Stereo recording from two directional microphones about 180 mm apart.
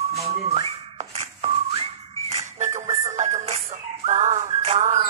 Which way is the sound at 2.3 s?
40° right (ahead or behind).